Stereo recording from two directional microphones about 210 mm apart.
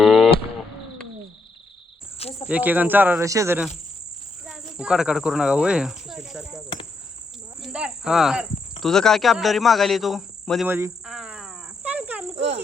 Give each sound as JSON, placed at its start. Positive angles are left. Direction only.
{"t": 0.0, "sound": "a sound", "side_deg": 0}
{"t": 2.1, "sound": "cricket", "side_deg": 30}
{"t": 2.5, "sound": "speech", "side_deg": -5}
{"t": 7.6, "sound": "cricket", "side_deg": -5}
{"t": 8.8, "sound": "a man's voice", "side_deg": 0}
{"t": 10.7, "sound": "speech", "side_deg": -10}
{"t": 11.0, "sound": "cricket", "side_deg": -5}